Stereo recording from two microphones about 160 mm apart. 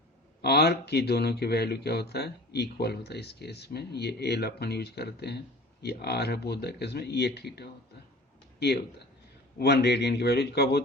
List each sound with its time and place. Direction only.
0.4 s speech: 90° left